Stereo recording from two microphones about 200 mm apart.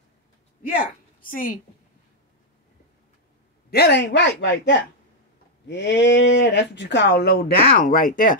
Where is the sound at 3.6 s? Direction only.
55° left (ahead or behind).